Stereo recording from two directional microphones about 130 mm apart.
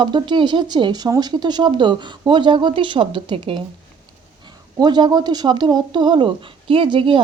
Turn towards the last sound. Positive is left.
turn(degrees=-40)  # may be behind; listen again after turning